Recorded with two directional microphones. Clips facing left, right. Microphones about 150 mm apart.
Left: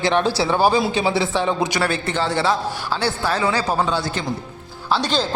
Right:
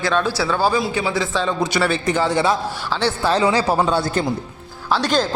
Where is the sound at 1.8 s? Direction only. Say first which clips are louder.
Right 3 dB; 10° right (ahead or behind).